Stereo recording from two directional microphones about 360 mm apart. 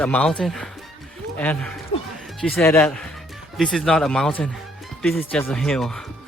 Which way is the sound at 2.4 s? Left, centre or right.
Centre.